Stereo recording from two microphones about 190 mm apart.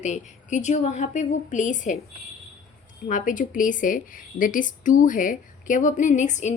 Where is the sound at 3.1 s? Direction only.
45° left (ahead or behind).